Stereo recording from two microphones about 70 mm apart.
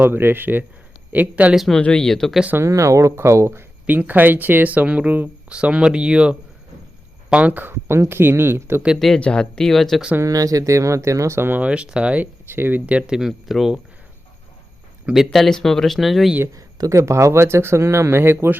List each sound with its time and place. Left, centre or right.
0.0 s speech: right
1.5 s speech: centre
2.6 s speech: right
3.8 s speech: right
9.0 s speech: centre
10.2 s speech: right
11.6 s speech: centre
12.8 s speech: centre
15.1 s speech: centre
16.6 s speech: right
17.0 s speech: right